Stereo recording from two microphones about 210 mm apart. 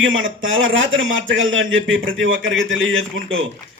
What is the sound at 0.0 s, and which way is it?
A man's voice, 65° right (ahead or behind).